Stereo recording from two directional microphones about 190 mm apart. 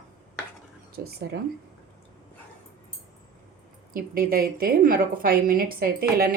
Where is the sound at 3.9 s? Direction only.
50° right (ahead or behind).